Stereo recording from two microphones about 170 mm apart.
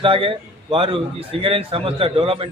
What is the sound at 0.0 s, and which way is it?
A man's voice, 30° right (ahead or behind).